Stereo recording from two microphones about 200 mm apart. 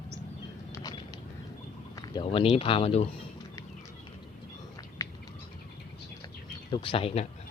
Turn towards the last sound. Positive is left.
turn(degrees=30)  # may be behind; listen again after turning